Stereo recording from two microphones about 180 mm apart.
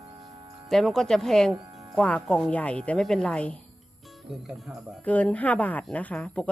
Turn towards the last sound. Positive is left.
turn(degrees=5)  # may be behind; listen again after turning